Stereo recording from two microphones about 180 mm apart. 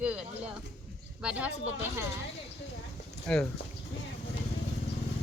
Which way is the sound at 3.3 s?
5° left (ahead or behind).